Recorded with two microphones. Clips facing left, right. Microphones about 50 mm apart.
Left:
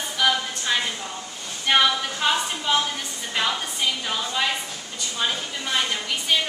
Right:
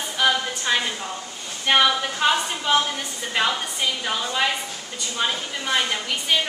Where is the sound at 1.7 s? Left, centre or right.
Centre.